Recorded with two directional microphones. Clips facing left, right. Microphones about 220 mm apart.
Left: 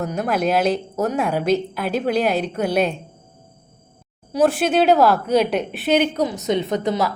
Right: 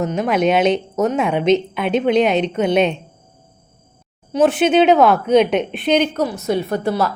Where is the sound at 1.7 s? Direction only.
5° left (ahead or behind).